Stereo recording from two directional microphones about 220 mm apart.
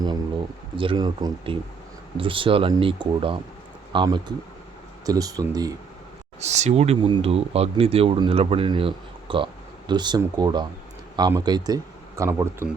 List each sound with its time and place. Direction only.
0.8 s speech: 20° right (ahead or behind)
6.4 s speech: 30° right (ahead or behind); by 12.6 s 10° right (ahead or behind)